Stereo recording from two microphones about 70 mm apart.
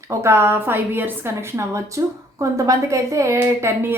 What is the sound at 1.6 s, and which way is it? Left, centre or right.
A woman's voice, right.